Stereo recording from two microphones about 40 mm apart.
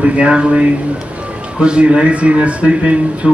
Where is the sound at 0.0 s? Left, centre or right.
Right.